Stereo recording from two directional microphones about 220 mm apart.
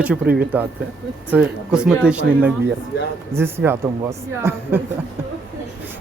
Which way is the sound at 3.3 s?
10° right (ahead or behind).